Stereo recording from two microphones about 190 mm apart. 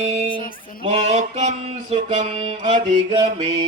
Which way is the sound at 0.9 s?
35° right (ahead or behind).